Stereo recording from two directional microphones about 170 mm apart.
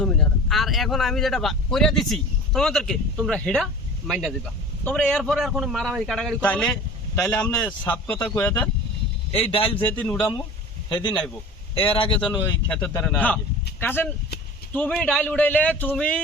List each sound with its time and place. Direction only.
0.0 s speech: 5° left (ahead or behind)
9.3 s speech: 35° left (ahead or behind)
9.8 s speech: 10° left (ahead or behind)
11.7 s speech: 30° left (ahead or behind)
12.7 s speech: 10° left (ahead or behind)